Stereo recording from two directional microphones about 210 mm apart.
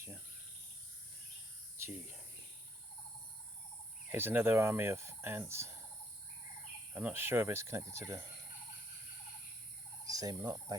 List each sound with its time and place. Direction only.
1.8 s speech: 10° right (ahead or behind)
4.1 s speech: 10° right (ahead or behind)
6.9 s speech: 10° right (ahead or behind)
10.1 s speech: 15° right (ahead or behind)